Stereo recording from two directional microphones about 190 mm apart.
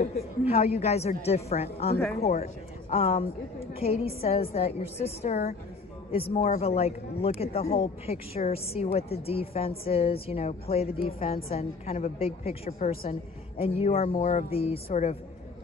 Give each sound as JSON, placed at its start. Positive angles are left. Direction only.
{"t": 0.0, "sound": "a woman's voice", "side_deg": 35}
{"t": 6.6, "sound": "a woman's voice", "side_deg": 30}